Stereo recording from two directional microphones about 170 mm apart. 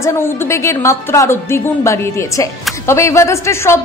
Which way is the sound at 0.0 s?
15° left (ahead or behind).